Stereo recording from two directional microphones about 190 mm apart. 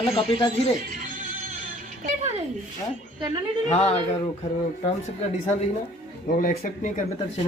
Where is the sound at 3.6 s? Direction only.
35° left (ahead or behind).